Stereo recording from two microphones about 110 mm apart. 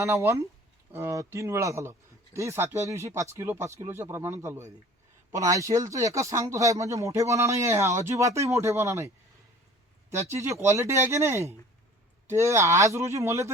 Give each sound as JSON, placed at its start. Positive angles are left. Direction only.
{"t": 0.0, "sound": "speech", "side_deg": -25}